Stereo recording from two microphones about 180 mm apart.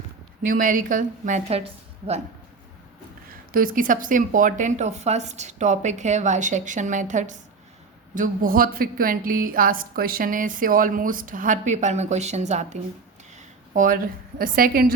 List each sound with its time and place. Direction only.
0.4 s a woman's voice: 50° right (ahead or behind)
3.5 s a woman's voice: 50° right (ahead or behind)